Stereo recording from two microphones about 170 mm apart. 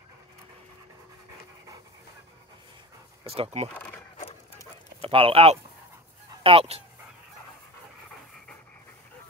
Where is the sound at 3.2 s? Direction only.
35° right (ahead or behind).